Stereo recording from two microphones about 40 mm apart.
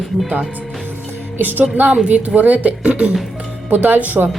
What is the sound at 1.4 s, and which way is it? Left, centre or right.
A woman's voice, right.